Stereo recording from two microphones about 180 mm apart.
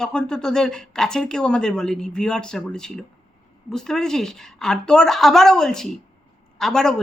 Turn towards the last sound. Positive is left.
turn(degrees=5)  # may be behind; listen again after turning